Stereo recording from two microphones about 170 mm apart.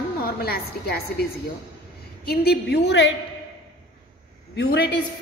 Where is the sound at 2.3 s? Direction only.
70° left (ahead or behind); by 3.1 s 90° left.